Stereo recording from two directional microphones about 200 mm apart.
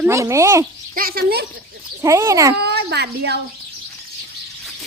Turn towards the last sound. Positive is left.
turn(degrees=-55)  # may be behind; listen again after turning